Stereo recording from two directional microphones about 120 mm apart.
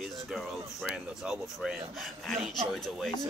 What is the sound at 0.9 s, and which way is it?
Speech, 5° right (ahead or behind).